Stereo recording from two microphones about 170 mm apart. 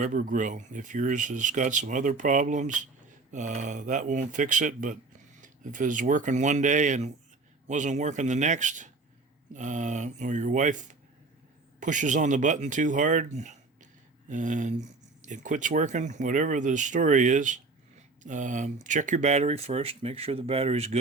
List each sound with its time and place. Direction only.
0.0 s speech: 50° right (ahead or behind)
11.8 s speech: 50° right (ahead or behind)